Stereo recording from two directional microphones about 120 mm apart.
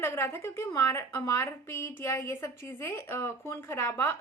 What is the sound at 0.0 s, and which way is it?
Speech, 20° left (ahead or behind).